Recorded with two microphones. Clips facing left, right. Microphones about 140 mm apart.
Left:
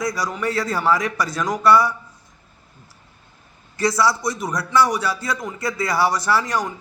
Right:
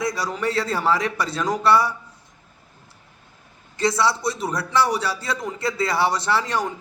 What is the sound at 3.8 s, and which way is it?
A man's voice, 25° right (ahead or behind).